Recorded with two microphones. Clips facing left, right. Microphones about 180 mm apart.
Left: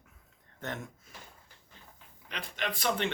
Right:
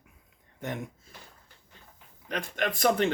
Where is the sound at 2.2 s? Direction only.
50° right (ahead or behind).